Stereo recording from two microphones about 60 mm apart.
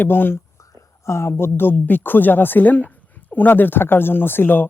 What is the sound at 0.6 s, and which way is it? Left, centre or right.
A woman's voice, left.